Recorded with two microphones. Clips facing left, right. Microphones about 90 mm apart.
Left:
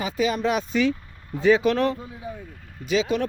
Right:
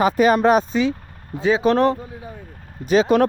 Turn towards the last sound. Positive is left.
turn(degrees=-55)  # may be behind; listen again after turning